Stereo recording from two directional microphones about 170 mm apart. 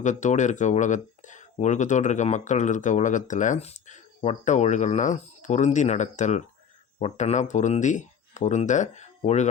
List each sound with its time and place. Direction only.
0.0 s speech: 45° left (ahead or behind)